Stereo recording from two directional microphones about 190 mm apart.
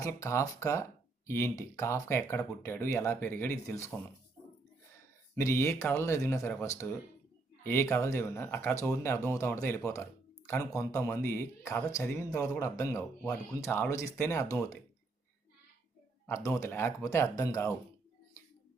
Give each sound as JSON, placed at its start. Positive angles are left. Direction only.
{"t": 0.0, "sound": "speech", "side_deg": 15}
{"t": 5.3, "sound": "speech", "side_deg": 15}
{"t": 16.2, "sound": "speech", "side_deg": 15}